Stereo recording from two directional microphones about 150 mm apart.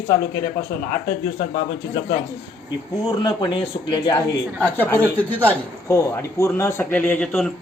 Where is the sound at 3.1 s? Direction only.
30° left (ahead or behind).